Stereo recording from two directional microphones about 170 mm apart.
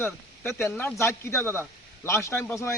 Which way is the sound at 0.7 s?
5° left (ahead or behind).